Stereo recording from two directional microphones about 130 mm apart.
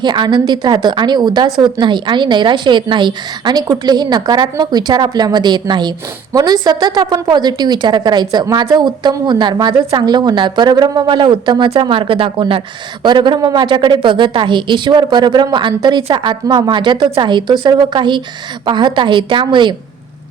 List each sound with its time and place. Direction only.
0.0 s a woman's voice: 35° right (ahead or behind)